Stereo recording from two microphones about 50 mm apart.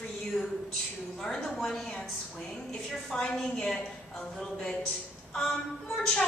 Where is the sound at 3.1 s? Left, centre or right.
Centre.